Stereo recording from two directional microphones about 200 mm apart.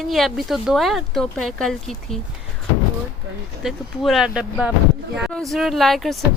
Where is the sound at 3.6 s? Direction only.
Centre (ahead or behind).